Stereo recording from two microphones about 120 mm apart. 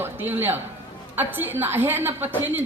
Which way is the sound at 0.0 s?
15° right (ahead or behind).